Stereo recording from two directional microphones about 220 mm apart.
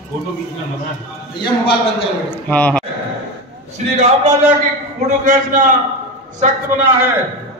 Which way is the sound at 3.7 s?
30° right (ahead or behind).